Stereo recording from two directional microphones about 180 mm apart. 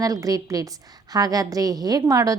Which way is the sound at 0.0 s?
20° right (ahead or behind).